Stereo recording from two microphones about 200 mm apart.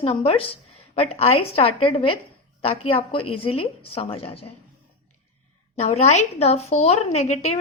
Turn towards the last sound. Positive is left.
turn(degrees=35)  # may be behind; listen again after turning